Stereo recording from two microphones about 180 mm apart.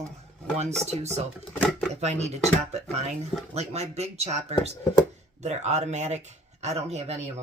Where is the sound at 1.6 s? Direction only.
5° left (ahead or behind).